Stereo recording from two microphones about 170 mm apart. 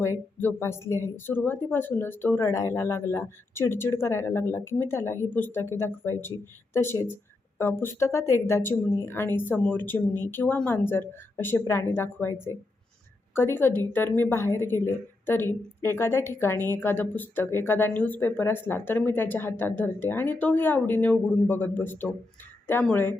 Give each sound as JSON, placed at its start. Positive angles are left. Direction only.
{"t": 0.3, "sound": "a woman's voice", "side_deg": 15}